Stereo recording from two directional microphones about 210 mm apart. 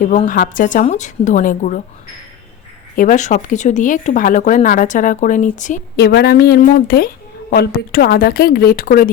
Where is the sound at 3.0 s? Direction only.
35° left (ahead or behind).